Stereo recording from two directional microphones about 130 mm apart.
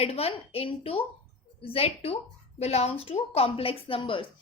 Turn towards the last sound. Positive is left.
turn(degrees=40)  # may be behind; listen again after turning